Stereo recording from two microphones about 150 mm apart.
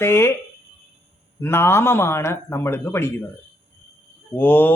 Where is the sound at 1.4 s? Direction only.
15° left (ahead or behind).